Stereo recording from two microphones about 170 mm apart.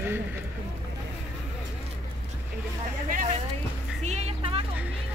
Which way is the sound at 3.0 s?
55° right (ahead or behind).